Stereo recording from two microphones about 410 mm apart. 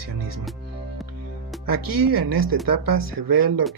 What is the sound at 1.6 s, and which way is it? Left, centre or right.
Speech, right.